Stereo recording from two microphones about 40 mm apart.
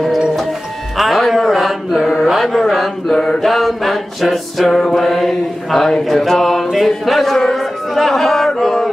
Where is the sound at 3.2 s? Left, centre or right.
Centre.